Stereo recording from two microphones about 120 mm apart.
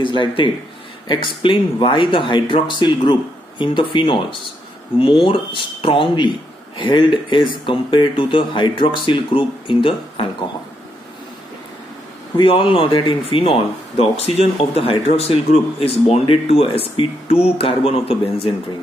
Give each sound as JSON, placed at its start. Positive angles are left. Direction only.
{"t": 0.0, "sound": "speech", "side_deg": 45}
{"t": 12.4, "sound": "speech", "side_deg": 50}